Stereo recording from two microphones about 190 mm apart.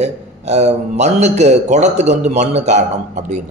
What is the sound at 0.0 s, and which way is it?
A man's voice, 35° right (ahead or behind).